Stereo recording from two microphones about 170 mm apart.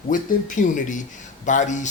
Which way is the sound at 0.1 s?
50° left (ahead or behind).